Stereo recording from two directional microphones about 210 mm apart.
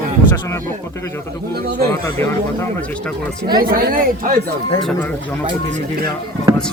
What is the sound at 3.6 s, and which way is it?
Speech, 40° right (ahead or behind).